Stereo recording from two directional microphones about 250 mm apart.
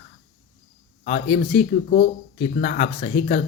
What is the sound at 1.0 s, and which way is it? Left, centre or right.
Speech, left.